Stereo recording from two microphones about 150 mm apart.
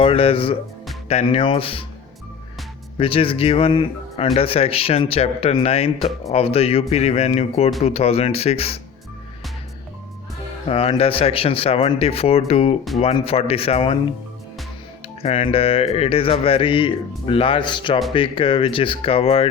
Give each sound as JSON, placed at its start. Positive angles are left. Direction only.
{"t": 0.0, "sound": "speech", "side_deg": 40}
{"t": 3.0, "sound": "speech", "side_deg": 40}
{"t": 10.7, "sound": "speech", "side_deg": 40}
{"t": 15.2, "sound": "speech", "side_deg": 40}